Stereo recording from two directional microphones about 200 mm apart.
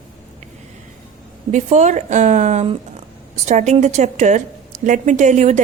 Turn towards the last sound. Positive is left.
turn(degrees=-35)  # may be behind; listen again after turning